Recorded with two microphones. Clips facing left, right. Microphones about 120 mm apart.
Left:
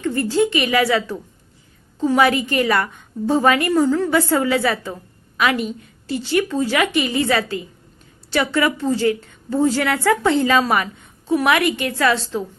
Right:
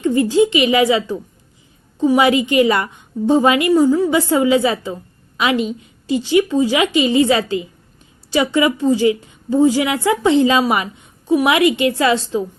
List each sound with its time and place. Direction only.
0.0 s a woman's voice: 15° right (ahead or behind)